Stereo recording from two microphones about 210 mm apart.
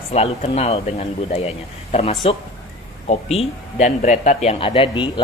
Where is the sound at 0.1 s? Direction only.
30° left (ahead or behind).